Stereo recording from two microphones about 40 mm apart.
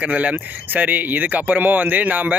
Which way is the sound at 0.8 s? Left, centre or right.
Right.